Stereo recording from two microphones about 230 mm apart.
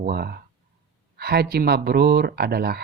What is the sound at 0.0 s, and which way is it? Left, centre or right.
Speech, right.